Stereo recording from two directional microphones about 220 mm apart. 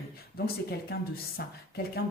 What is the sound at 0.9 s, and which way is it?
Speech, 45° left (ahead or behind).